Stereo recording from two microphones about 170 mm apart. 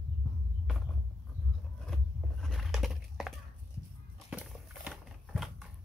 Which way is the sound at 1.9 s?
5° left (ahead or behind).